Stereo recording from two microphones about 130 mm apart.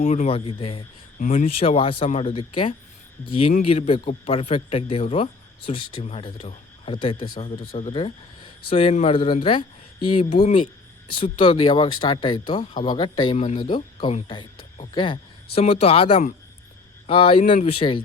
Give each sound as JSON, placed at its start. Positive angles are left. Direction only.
{"t": 0.0, "sound": "speech", "side_deg": 70}
{"t": 0.3, "sound": "speech", "side_deg": 45}
{"t": 1.2, "sound": "speech", "side_deg": 85}
{"t": 1.5, "sound": "a man's voice", "side_deg": 45}
{"t": 3.5, "sound": "a man's voice", "side_deg": 55}
{"t": 7.2, "sound": "a man's voice", "side_deg": 50}
{"t": 7.9, "sound": "speech", "side_deg": 40}
{"t": 15.6, "sound": "a man's voice", "side_deg": 50}
{"t": 17.4, "sound": "speech", "side_deg": 65}
{"t": 17.7, "sound": "a man's voice", "side_deg": 45}